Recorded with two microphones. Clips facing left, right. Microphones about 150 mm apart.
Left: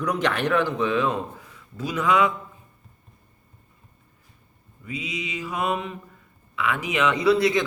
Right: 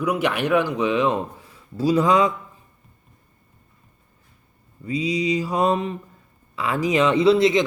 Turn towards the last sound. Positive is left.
turn(degrees=-20)  # may be behind; listen again after turning